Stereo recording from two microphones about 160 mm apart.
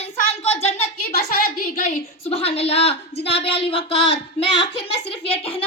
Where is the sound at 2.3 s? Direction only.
40° left (ahead or behind).